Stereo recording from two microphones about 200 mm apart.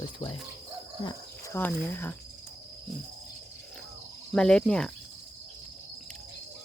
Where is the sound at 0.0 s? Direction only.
25° left (ahead or behind).